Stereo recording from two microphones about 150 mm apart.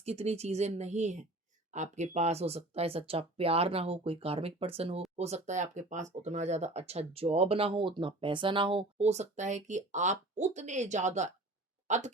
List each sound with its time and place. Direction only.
0.0 s speech: 45° right (ahead or behind)